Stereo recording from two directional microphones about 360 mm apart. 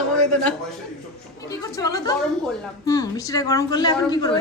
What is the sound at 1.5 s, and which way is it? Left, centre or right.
A woman's voice, centre.